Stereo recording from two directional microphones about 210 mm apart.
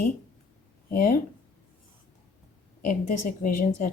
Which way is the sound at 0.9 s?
40° left (ahead or behind).